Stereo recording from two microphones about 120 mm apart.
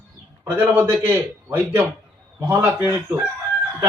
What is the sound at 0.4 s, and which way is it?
A man's voice, 15° right (ahead or behind).